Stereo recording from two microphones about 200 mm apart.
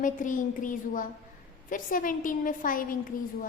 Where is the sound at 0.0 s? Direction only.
40° left (ahead or behind).